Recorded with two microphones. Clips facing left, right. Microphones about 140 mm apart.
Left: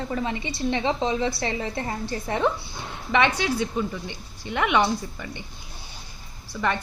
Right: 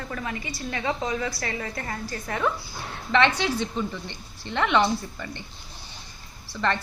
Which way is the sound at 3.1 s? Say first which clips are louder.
Even; 10° left (ahead or behind).